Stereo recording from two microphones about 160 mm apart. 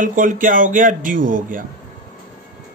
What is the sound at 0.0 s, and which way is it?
A man's voice, 55° right (ahead or behind).